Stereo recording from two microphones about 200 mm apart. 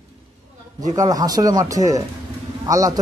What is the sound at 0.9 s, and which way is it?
A man's voice, 15° right (ahead or behind).